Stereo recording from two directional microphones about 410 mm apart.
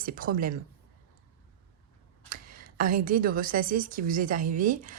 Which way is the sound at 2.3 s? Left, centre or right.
Right.